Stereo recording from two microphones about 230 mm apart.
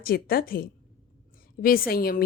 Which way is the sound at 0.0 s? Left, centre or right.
Left.